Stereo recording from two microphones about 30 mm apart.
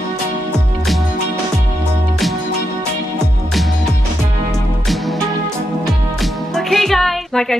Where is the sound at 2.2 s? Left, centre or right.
Centre.